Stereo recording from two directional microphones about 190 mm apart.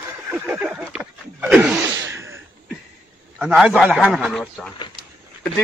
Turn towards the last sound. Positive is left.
turn(degrees=0)  # may be behind; listen again after turning